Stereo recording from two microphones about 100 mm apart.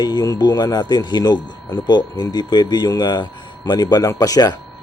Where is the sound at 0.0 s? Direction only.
40° left (ahead or behind).